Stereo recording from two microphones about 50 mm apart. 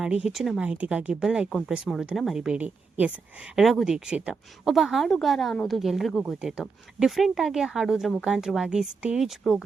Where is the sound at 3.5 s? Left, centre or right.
Centre.